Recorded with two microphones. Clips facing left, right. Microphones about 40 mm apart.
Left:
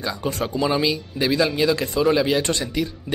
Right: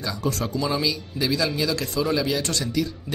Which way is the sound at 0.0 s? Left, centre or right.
Left.